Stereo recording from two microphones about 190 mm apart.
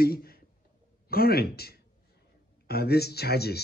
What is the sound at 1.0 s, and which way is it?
Speech, 55° left (ahead or behind).